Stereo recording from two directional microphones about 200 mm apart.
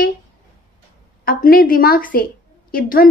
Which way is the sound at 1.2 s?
45° left (ahead or behind).